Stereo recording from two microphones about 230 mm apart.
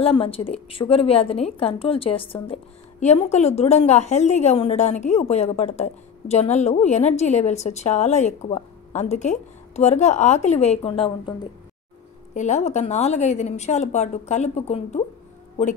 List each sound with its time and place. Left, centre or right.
0.0 s a woman's voice: left
12.4 s a woman's voice: left